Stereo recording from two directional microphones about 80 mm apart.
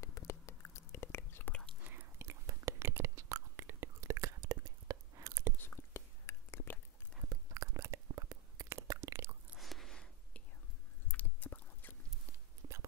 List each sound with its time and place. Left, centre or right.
0.0 s whispering: left
1.8 s whispering: right
5.6 s whispering: left
7.5 s a sound: right
8.6 s chewing: right
9.6 s a sound: centre
11.1 s chewing: left
12.6 s whispering: right